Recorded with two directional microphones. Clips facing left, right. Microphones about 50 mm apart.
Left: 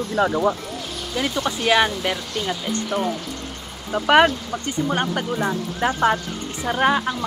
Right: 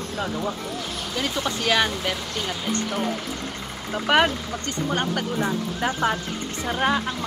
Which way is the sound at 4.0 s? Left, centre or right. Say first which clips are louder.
Left 4 dB; centre.